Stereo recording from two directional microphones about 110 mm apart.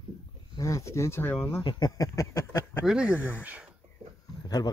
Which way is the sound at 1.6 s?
45° left (ahead or behind).